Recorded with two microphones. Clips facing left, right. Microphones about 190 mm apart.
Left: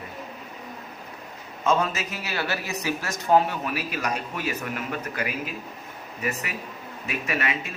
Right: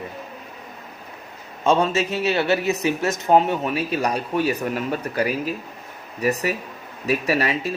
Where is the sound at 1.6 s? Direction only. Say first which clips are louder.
Right 5 dB; 30° right (ahead or behind).